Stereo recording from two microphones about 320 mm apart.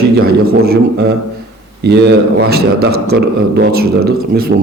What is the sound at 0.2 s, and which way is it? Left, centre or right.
A man's voice, right.